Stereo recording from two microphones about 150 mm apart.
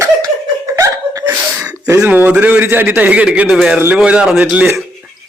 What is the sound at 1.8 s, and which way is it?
A man's voice, 15° right (ahead or behind).